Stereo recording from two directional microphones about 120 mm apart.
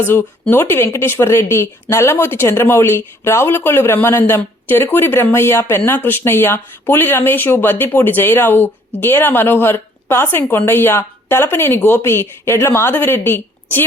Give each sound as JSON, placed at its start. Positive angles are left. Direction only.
{"t": 0.0, "sound": "speech", "side_deg": 20}